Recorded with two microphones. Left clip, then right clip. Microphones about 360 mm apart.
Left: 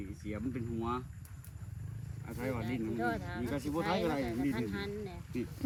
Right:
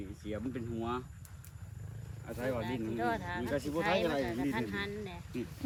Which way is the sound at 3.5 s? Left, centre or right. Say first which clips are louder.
Right 2 dB; centre.